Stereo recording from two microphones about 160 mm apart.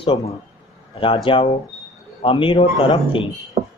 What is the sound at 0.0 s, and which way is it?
A man's voice, 35° left (ahead or behind).